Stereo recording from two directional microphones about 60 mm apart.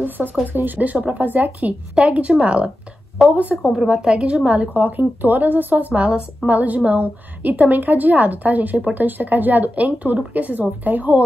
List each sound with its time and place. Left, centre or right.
0.0 s a woman's voice: right
3.2 s a woman's voice: centre; by 11.2 s right